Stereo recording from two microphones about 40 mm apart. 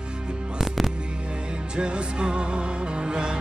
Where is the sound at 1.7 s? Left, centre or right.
Right.